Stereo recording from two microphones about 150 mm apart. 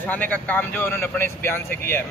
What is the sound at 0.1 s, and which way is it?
Speech, 10° left (ahead or behind).